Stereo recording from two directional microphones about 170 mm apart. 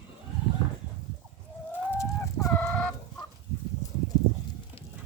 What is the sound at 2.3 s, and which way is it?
Fowl, 20° left (ahead or behind).